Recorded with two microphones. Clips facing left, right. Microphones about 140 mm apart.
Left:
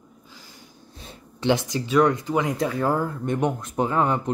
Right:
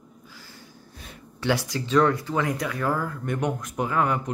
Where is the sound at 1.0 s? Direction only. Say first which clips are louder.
Left 4 dB; 25° left (ahead or behind).